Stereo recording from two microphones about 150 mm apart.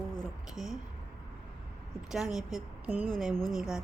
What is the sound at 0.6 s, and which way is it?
Speech, 50° left (ahead or behind).